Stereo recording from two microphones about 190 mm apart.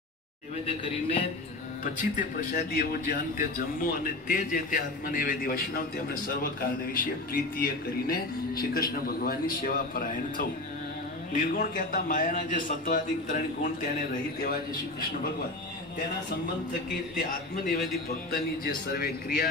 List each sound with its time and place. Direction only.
0.7 s a man's voice: 30° left (ahead or behind)
2.0 s a man's voice: 45° left (ahead or behind)
18.3 s a man's voice: 50° left (ahead or behind)